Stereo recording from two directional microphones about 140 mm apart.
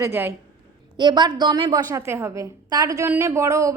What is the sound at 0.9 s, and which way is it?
A woman's voice, 30° right (ahead or behind).